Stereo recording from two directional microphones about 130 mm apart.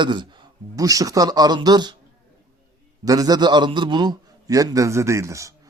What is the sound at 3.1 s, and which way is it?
A man's voice, 30° right (ahead or behind).